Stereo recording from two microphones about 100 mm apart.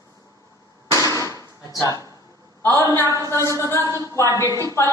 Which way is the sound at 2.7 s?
25° left (ahead or behind).